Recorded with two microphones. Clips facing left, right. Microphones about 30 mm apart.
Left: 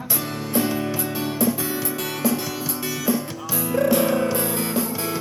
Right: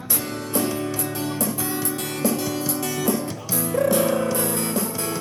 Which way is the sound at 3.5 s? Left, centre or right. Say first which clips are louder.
Left 1 dB; left.